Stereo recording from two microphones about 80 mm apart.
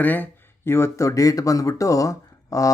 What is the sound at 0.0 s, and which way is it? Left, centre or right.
Speech, left.